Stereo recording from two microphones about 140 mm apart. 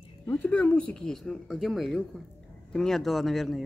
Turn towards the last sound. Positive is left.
turn(degrees=0)  # may be behind; listen again after turning